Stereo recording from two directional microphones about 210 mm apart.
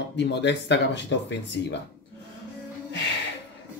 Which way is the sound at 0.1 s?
55° left (ahead or behind).